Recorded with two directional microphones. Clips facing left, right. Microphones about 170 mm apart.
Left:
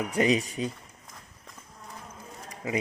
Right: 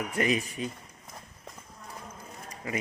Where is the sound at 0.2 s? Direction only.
25° left (ahead or behind).